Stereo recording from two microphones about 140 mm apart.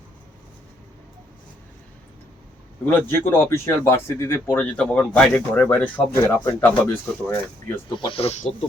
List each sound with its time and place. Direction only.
2.8 s speech: 15° left (ahead or behind)
7.9 s speech: 35° left (ahead or behind); by 8.5 s 55° left (ahead or behind)